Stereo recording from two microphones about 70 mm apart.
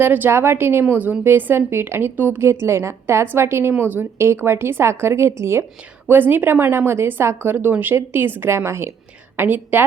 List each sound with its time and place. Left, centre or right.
0.0 s a woman's voice: right
2.4 s a woman's voice: right
9.4 s a woman's voice: right